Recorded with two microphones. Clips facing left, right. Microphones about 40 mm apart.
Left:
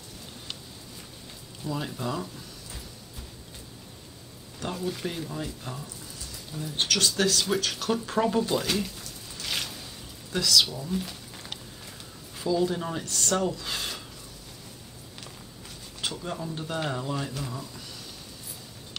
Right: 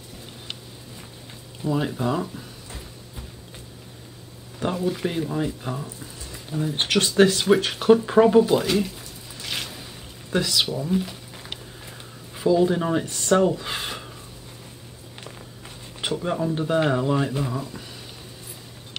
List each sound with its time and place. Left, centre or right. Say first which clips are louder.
1.6 s speech: right 8 dB; right
4.6 s speech: right 7 dB; right
10.3 s speech: right 2 dB; right
11.1 s a sound: right 3 dB; centre
12.4 s speech: right 7 dB; right
16.0 s speech: right 8 dB; right